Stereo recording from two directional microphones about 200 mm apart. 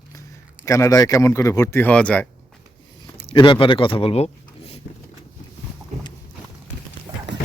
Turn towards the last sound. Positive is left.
turn(degrees=-20)  # may be behind; listen again after turning